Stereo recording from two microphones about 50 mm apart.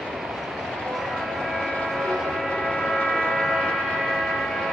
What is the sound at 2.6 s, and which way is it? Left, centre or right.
Vehicle, centre.